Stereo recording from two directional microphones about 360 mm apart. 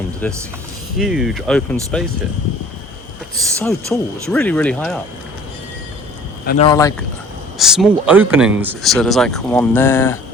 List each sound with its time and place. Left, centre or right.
0.2 s speech: centre
3.6 s speech: centre
6.4 s speech: left
6.7 s speech: centre
7.6 s speech: centre